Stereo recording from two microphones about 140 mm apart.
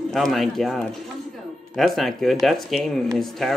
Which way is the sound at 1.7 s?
Centre (ahead or behind).